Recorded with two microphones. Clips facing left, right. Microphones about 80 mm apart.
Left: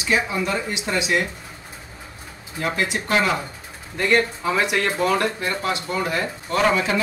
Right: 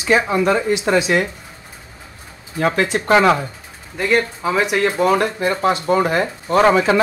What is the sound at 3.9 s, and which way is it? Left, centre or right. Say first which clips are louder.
Speech: right 2 dB; centre.